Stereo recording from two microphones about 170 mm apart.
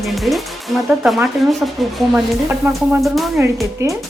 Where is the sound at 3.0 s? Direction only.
Centre (ahead or behind).